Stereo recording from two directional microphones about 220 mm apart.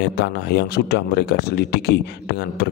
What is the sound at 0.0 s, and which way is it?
A man's voice, 50° left (ahead or behind).